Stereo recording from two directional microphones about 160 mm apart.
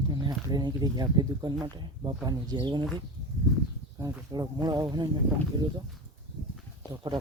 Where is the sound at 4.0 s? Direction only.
20° right (ahead or behind).